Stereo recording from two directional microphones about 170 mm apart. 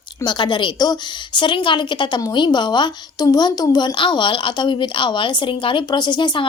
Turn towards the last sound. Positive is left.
turn(degrees=25)  # may be behind; listen again after turning